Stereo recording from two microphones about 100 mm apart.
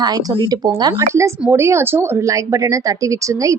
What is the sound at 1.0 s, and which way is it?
Speech, 30° right (ahead or behind).